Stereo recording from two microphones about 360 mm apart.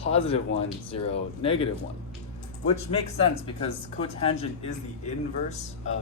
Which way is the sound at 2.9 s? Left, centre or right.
Centre.